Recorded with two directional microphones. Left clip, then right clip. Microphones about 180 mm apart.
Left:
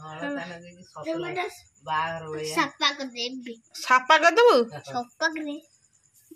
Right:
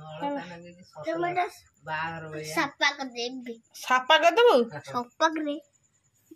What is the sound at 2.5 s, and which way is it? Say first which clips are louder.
A woman's voice: left 1 dB; 5° left (ahead or behind).